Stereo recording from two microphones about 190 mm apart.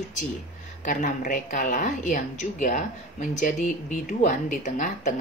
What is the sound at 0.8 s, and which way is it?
A woman's voice, 40° left (ahead or behind).